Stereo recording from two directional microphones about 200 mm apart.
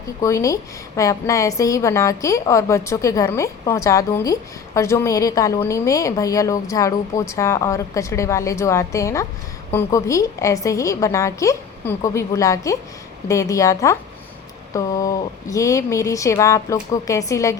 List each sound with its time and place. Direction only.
0.2 s a woman's voice: 15° left (ahead or behind)